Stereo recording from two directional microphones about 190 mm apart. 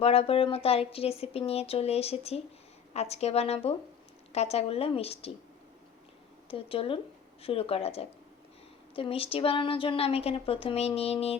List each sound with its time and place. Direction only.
0.0 s speech: 30° left (ahead or behind)
6.5 s speech: 30° left (ahead or behind)